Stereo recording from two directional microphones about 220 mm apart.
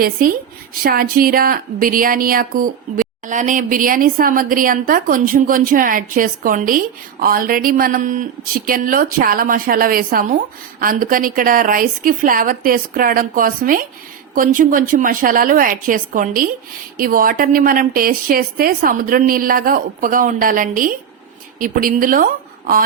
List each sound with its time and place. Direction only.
0.0 s a woman's voice: 40° right (ahead or behind)